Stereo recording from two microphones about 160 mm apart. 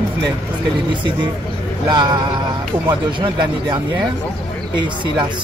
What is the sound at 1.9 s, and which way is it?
Speech, 25° right (ahead or behind).